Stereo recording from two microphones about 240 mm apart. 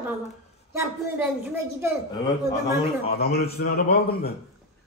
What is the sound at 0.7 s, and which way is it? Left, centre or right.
A woman's voice, centre.